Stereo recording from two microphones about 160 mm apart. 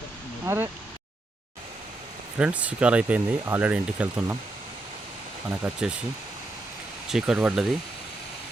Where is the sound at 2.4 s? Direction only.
10° right (ahead or behind).